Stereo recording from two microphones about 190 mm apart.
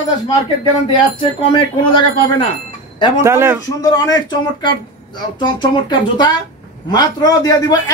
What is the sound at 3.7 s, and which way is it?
Speech, 20° left (ahead or behind).